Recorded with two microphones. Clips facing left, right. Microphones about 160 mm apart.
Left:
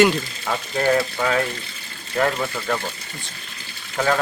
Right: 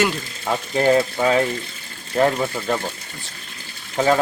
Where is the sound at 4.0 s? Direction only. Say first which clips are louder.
Right 3 dB; 25° right (ahead or behind).